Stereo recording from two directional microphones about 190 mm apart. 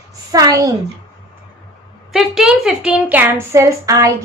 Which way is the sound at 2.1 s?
Centre (ahead or behind).